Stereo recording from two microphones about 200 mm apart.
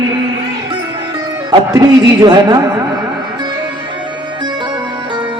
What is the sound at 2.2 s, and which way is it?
Speech, 20° right (ahead or behind).